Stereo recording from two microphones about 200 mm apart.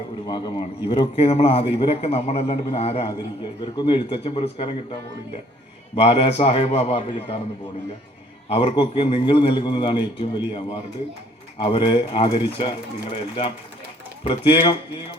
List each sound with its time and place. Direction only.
0.3 s a man's voice: 20° left (ahead or behind)
6.0 s a man's voice: 30° left (ahead or behind)
8.4 s a man's voice: 30° left (ahead or behind)
11.5 s a man's voice: 25° left (ahead or behind)